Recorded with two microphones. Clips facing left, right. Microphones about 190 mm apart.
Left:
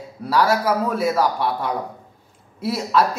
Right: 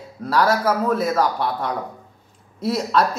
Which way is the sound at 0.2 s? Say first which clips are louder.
Even; 10° left (ahead or behind).